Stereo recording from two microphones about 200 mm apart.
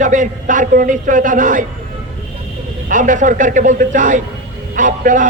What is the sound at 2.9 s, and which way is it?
A man's voice, 40° right (ahead or behind).